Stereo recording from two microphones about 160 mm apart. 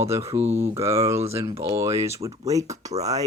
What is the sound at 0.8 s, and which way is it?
Speech, 15° right (ahead or behind).